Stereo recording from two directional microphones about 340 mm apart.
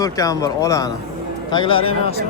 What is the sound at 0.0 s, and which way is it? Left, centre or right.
Speech, centre.